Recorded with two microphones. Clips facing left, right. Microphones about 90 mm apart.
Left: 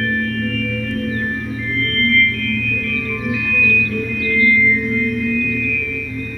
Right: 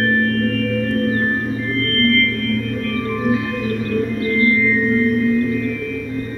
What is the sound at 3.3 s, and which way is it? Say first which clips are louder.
Music: left 1 dB; 35° right (ahead or behind).